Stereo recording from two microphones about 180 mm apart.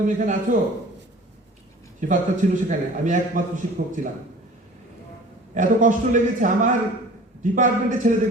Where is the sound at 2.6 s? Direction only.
45° right (ahead or behind).